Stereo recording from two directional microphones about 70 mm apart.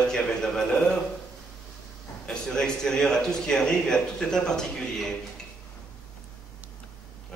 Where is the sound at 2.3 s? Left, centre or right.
Centre.